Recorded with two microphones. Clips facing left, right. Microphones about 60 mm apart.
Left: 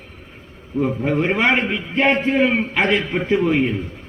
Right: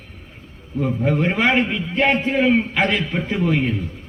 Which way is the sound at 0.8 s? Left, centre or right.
Centre.